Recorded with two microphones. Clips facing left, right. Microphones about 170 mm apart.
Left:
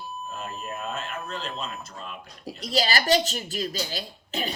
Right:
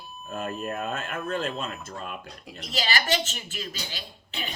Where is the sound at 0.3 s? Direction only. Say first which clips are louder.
Right 7 dB; 55° right (ahead or behind).